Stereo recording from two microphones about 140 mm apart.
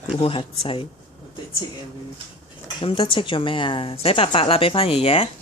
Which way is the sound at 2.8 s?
40° left (ahead or behind).